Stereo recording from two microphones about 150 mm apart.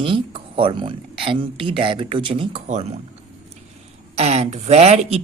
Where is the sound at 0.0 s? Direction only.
35° right (ahead or behind).